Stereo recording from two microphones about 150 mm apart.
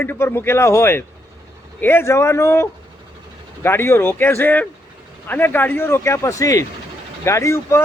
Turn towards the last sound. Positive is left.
turn(degrees=20)  # may be behind; listen again after turning